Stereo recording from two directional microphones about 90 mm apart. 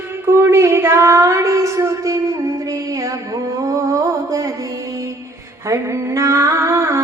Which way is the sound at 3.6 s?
40° right (ahead or behind).